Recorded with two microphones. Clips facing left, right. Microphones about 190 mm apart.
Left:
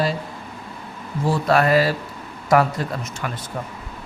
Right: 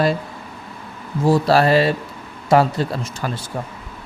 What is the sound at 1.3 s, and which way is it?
Speech, 30° right (ahead or behind).